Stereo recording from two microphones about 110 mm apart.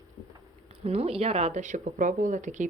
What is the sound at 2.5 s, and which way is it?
Speech, 90° right.